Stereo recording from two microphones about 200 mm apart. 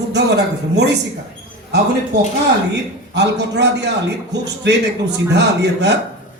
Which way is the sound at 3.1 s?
60° right (ahead or behind).